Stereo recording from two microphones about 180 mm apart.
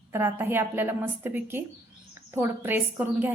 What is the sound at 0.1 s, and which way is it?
A woman's voice, 10° right (ahead or behind).